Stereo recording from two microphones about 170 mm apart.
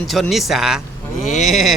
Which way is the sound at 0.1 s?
Centre (ahead or behind).